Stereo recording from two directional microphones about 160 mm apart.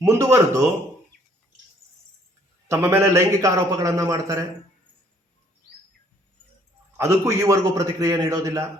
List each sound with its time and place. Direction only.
0.0 s a man's voice: 20° right (ahead or behind)
2.6 s a man's voice: 15° right (ahead or behind)
6.9 s a man's voice: 20° right (ahead or behind)